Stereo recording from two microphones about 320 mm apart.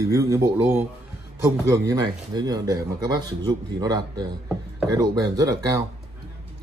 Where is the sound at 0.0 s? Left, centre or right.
Centre.